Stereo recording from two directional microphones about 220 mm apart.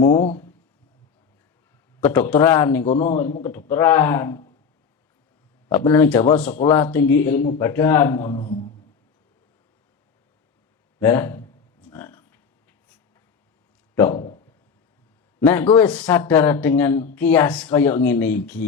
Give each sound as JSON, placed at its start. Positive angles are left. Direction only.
{"t": 0.1, "sound": "speech", "side_deg": 30}
{"t": 2.0, "sound": "speech", "side_deg": 10}
{"t": 2.8, "sound": "a man's voice", "side_deg": 30}
{"t": 3.7, "sound": "speech", "side_deg": 10}
{"t": 5.6, "sound": "speech", "side_deg": 15}
{"t": 11.0, "sound": "a sound", "side_deg": 10}
{"t": 13.9, "sound": "a sound", "side_deg": 10}
{"t": 15.4, "sound": "speech", "side_deg": 10}